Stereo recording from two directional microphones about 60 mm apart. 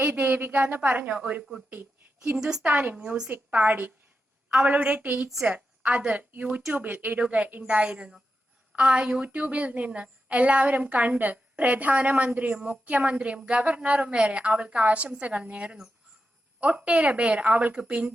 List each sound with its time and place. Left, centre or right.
0.0 s a woman's voice: right
12.5 s a woman's voice: centre
12.8 s a woman's voice: right